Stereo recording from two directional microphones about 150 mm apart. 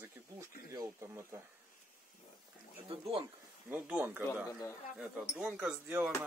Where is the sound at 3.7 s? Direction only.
10° right (ahead or behind).